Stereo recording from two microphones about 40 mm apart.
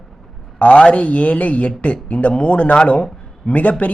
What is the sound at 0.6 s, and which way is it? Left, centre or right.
Speech, left.